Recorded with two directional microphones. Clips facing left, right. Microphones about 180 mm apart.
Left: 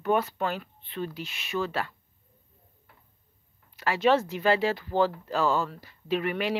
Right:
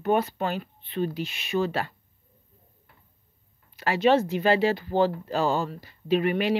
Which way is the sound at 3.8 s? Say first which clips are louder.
Right 2 dB; 25° right (ahead or behind).